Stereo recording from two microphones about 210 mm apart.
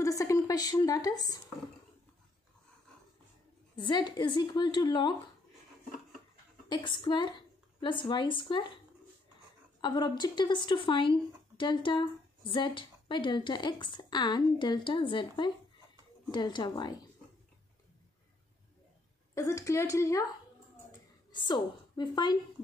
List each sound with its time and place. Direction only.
0.0 s a sound: 15° left (ahead or behind)
3.7 s speech: 20° left (ahead or behind)
6.7 s speech: 20° left (ahead or behind)
9.8 s speech: 20° left (ahead or behind)
19.3 s speech: 15° left (ahead or behind)
21.3 s a woman's voice: 20° left (ahead or behind)